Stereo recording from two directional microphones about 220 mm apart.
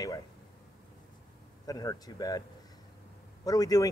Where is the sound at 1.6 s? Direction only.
15° left (ahead or behind).